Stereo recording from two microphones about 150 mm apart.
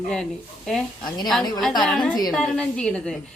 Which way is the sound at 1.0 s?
25° left (ahead or behind).